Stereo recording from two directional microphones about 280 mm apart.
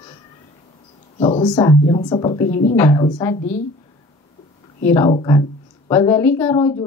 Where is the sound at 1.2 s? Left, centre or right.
Centre.